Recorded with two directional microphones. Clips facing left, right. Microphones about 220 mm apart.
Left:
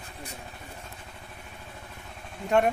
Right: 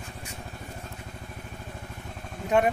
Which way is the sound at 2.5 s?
5° right (ahead or behind).